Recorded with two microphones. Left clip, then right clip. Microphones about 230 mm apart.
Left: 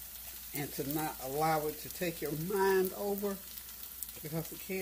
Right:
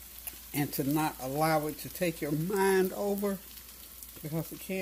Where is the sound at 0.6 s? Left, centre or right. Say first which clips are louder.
Right 6 dB; right.